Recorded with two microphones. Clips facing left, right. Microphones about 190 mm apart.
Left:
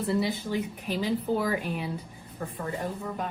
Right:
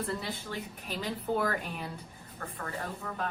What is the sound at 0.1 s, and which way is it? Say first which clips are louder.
Speech: left 9 dB; 10° left (ahead or behind).